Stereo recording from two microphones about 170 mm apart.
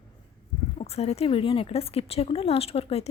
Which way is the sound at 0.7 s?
40° left (ahead or behind).